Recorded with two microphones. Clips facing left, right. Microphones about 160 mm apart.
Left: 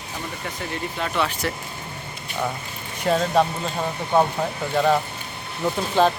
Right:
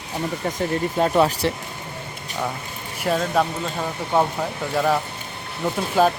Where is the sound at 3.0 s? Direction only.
Centre (ahead or behind).